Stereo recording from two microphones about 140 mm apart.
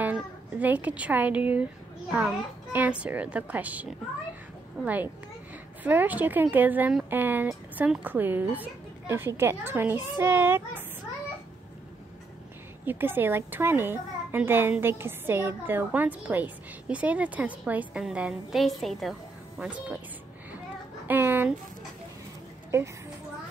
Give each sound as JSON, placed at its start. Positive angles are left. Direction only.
{"t": 0.0, "sound": "a child's voice", "side_deg": -10}
{"t": 12.8, "sound": "a child's voice", "side_deg": -15}
{"t": 21.1, "sound": "a child's voice", "side_deg": -15}
{"t": 22.7, "sound": "a woman's voice", "side_deg": -20}